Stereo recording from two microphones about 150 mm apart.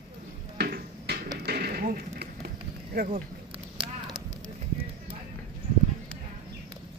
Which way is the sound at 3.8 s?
30° right (ahead or behind).